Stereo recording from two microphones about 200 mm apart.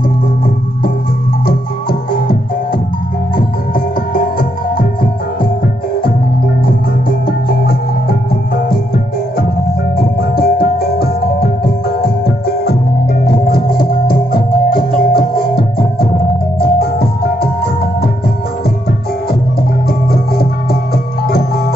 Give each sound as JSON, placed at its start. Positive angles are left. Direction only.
{"t": 1.4, "sound": "music", "side_deg": 45}
{"t": 6.6, "sound": "music", "side_deg": 45}
{"t": 13.5, "sound": "music", "side_deg": 45}